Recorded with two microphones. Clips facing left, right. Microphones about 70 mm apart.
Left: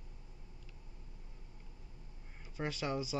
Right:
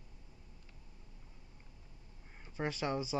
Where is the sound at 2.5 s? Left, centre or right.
Centre.